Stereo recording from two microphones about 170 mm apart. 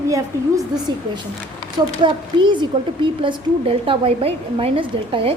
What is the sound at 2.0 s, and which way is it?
A woman's voice, 30° right (ahead or behind).